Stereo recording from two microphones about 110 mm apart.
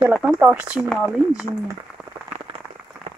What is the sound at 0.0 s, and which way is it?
Speech, 5° right (ahead or behind).